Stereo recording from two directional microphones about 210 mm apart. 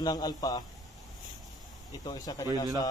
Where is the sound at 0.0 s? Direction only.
20° left (ahead or behind).